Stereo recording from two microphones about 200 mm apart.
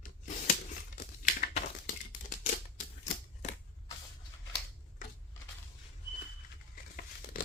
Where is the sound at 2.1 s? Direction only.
40° left (ahead or behind).